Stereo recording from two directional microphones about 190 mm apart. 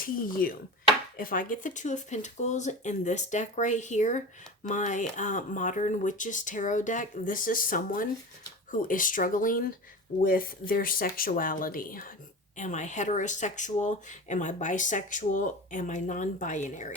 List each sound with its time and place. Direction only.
0.0 s speech: 50° left (ahead or behind)